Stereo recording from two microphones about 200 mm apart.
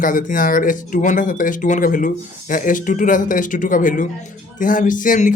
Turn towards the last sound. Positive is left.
turn(degrees=40)  # may be behind; listen again after turning